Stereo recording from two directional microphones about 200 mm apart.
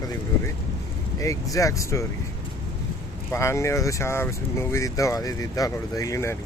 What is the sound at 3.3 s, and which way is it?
Speech, 15° left (ahead or behind).